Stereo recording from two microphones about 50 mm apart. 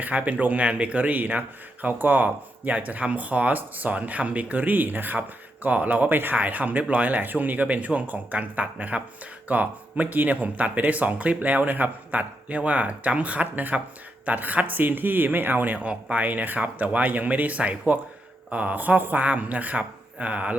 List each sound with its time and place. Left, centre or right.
0.0 s speech: right